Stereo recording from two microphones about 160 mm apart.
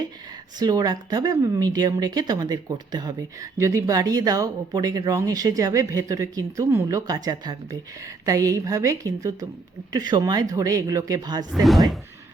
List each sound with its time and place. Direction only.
0.6 s speech: 25° right (ahead or behind)
11.5 s speech: centre (ahead or behind)